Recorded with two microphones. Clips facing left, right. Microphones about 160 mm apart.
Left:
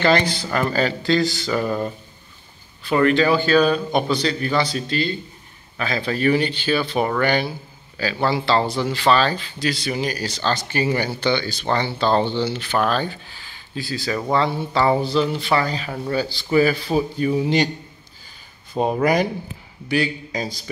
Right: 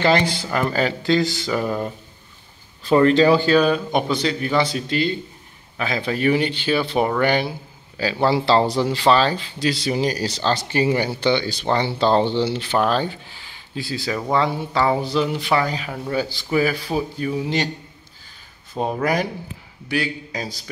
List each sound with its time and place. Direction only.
0.2 s speech: 25° right (ahead or behind)
0.5 s speech: 15° right (ahead or behind)
2.9 s speech: 30° right (ahead or behind)
3.5 s speech: 15° right (ahead or behind)
14.1 s speech: 10° right (ahead or behind)
18.8 s speech: 5° left (ahead or behind)